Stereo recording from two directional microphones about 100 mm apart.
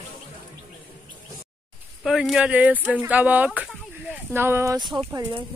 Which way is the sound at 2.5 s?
15° right (ahead or behind).